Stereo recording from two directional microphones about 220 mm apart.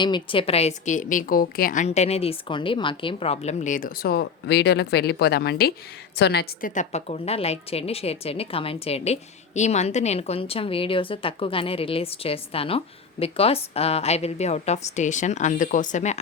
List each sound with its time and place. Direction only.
0.0 s a woman's voice: 20° left (ahead or behind)